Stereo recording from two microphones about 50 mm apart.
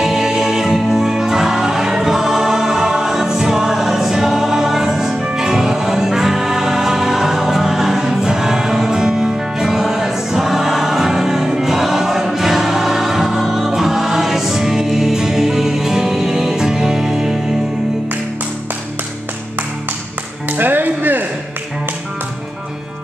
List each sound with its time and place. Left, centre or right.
0.0 s music: centre
20.4 s music: right